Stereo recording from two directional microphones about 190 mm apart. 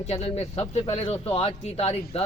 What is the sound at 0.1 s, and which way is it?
A man's voice, 30° left (ahead or behind).